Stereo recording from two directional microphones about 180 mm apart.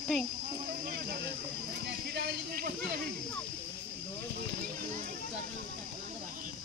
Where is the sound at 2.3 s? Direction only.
55° right (ahead or behind).